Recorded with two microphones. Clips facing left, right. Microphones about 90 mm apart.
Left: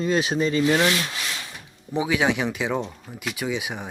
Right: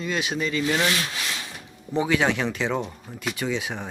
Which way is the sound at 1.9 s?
10° left (ahead or behind).